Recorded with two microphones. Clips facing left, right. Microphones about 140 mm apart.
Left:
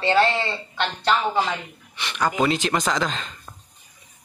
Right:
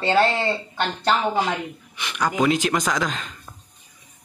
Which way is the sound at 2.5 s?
5° right (ahead or behind).